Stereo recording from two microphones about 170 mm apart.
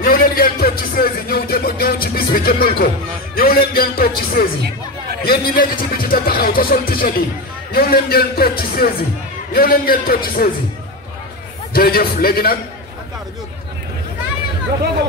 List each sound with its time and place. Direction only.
0.0 s a sound: 60° left (ahead or behind)
2.1 s speech: 60° left (ahead or behind)
3.3 s music: 60° left (ahead or behind)
4.4 s speech: 65° left (ahead or behind)
11.7 s speech: 60° left (ahead or behind)